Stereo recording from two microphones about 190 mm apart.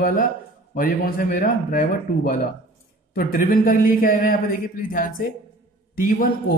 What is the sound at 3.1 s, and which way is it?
A man's voice, 50° left (ahead or behind).